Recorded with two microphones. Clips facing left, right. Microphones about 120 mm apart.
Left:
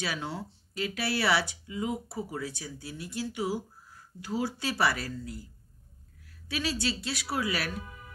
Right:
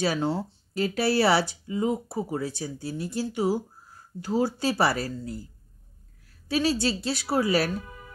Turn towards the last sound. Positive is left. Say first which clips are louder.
# right 8 dB
turn(degrees=-35)  # may be behind; listen again after turning